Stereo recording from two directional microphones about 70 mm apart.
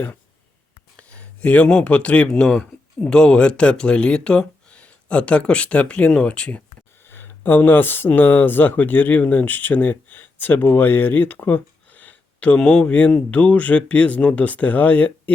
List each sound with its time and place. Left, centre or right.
0.9 s speech: centre
7.0 s speech: left
12.5 s speech: centre